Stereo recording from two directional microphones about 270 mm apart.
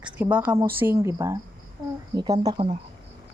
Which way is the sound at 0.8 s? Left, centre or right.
Centre.